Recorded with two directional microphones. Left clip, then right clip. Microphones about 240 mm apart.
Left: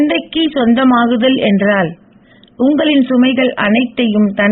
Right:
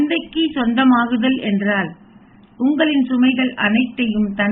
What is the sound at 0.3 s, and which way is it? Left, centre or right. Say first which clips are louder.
A woman's voice: left 6 dB; left.